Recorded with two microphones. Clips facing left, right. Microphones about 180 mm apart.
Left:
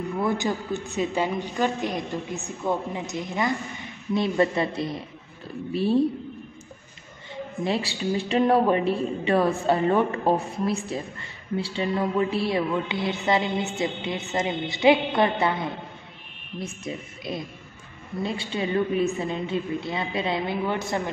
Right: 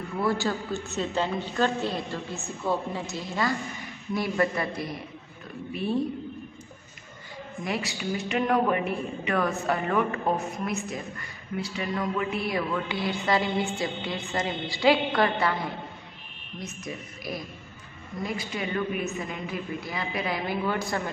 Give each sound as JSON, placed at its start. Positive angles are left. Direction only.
{"t": 0.2, "sound": "a woman's voice", "side_deg": 20}
{"t": 7.6, "sound": "a woman's voice", "side_deg": 30}